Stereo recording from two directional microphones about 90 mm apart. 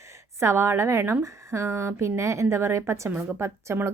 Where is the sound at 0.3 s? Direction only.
30° right (ahead or behind).